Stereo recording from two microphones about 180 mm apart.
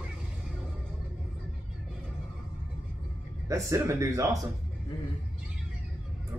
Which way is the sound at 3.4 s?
15° right (ahead or behind).